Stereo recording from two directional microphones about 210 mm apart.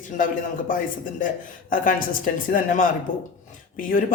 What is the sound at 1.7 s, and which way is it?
Speech, 40° left (ahead or behind).